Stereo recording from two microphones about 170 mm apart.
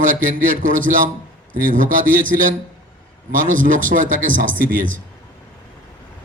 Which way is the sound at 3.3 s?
50° right (ahead or behind).